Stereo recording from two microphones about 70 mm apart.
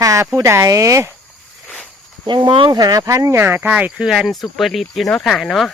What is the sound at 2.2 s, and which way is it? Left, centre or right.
Speech, right.